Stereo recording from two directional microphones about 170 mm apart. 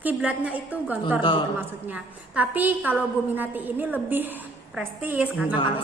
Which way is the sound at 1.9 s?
10° right (ahead or behind).